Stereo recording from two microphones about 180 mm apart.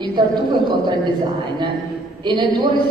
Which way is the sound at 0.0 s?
25° right (ahead or behind).